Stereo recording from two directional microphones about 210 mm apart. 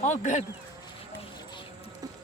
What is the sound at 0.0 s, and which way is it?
Speech, 35° left (ahead or behind).